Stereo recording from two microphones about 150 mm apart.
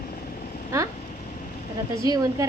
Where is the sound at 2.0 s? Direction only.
25° right (ahead or behind).